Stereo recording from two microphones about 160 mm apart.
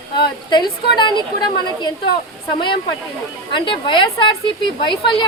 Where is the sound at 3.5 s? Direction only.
30° left (ahead or behind).